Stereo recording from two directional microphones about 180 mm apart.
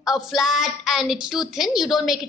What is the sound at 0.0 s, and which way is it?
A woman's voice, centre (ahead or behind).